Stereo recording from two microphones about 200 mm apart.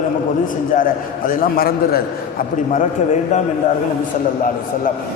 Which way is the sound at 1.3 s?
45° left (ahead or behind).